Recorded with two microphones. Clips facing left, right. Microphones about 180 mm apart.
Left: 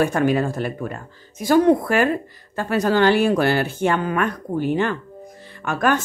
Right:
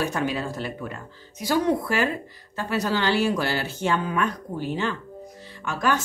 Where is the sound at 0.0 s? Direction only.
55° left (ahead or behind).